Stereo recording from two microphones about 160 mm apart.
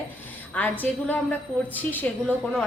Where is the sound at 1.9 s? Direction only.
10° left (ahead or behind).